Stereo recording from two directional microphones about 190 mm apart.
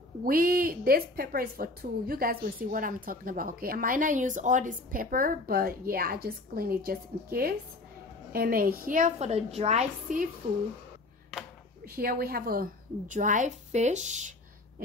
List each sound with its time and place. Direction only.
0.2 s a woman's voice: 50° right (ahead or behind)
11.8 s a woman's voice: 50° right (ahead or behind)